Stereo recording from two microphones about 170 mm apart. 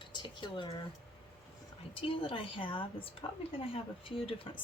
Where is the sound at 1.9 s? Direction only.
30° left (ahead or behind).